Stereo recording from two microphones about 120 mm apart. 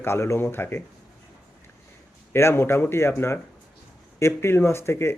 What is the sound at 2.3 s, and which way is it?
Speech, 20° left (ahead or behind).